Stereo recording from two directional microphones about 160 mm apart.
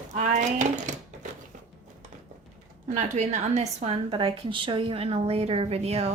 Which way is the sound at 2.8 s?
50° right (ahead or behind).